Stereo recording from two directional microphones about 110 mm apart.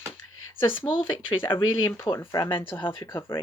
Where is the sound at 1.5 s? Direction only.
50° left (ahead or behind).